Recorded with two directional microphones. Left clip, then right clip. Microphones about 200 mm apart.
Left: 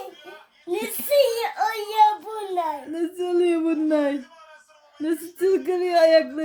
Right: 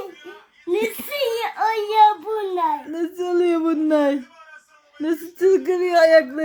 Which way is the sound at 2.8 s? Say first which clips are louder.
Right 2 dB; 10° right (ahead or behind).